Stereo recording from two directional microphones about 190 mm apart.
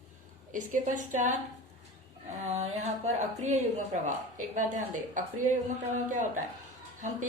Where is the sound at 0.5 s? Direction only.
45° right (ahead or behind).